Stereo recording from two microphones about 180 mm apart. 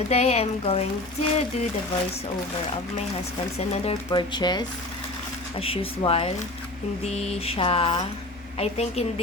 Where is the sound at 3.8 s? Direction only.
25° left (ahead or behind).